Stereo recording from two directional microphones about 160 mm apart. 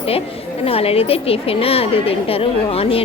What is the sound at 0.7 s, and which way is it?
A woman's voice, 35° left (ahead or behind).